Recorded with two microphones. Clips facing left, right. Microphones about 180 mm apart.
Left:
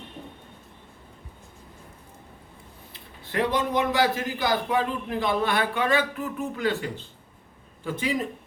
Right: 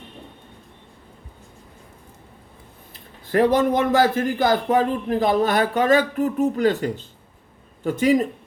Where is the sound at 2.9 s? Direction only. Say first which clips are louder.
Right 11 dB; 45° right (ahead or behind).